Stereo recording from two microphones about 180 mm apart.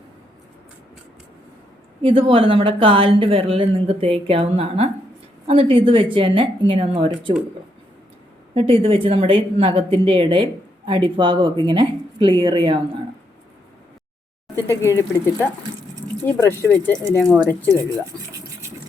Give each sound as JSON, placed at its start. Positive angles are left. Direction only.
{"t": 2.0, "sound": "a woman's voice", "side_deg": -30}
{"t": 8.5, "sound": "a woman's voice", "side_deg": -35}
{"t": 14.5, "sound": "speech", "side_deg": 15}